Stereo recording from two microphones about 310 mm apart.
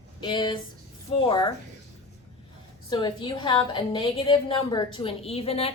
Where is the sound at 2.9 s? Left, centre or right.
Centre.